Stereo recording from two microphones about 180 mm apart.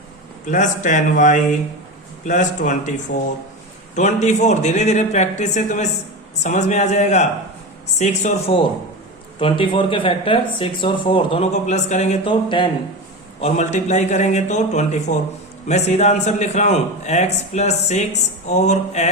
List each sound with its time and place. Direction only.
0.4 s speech: 45° left (ahead or behind)
3.1 s speech: 55° left (ahead or behind)
3.9 s a man's voice: 40° left (ahead or behind)
13.4 s a man's voice: 40° left (ahead or behind)